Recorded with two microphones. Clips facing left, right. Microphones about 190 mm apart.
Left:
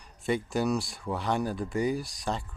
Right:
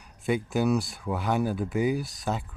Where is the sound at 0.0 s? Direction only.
Centre (ahead or behind).